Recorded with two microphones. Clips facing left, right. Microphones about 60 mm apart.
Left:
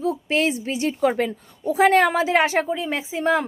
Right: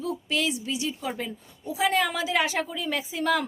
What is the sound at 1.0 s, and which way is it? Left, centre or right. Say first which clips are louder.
A woman's voice: left 12 dB; left.